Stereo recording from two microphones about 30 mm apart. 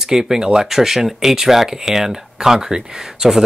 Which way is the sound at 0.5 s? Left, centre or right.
Centre.